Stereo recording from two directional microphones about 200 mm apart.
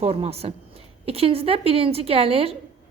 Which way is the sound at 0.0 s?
30° right (ahead or behind).